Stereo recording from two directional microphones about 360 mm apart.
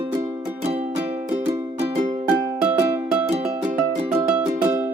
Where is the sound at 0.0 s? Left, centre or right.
Centre.